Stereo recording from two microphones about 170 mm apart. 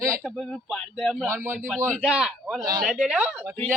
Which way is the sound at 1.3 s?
15° right (ahead or behind).